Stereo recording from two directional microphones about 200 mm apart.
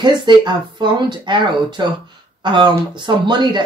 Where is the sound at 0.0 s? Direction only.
20° right (ahead or behind).